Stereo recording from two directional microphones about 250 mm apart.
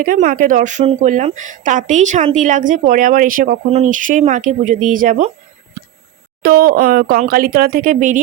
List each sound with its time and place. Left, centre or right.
0.0 s a woman's voice: right
6.4 s a woman's voice: right